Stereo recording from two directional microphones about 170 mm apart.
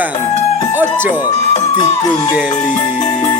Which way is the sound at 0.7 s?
10° right (ahead or behind).